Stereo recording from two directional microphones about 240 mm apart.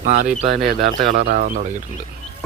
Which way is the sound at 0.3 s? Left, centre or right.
Centre.